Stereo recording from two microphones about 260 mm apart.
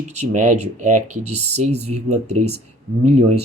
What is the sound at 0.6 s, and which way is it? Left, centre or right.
Speech, right.